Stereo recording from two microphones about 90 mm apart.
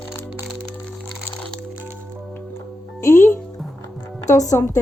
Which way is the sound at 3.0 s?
25° left (ahead or behind).